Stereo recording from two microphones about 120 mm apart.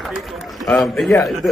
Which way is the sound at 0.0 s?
Centre (ahead or behind).